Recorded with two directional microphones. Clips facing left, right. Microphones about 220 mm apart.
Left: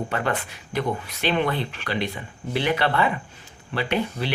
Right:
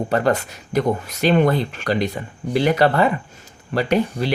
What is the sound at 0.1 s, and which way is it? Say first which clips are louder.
Speech: right 7 dB; 40° right (ahead or behind).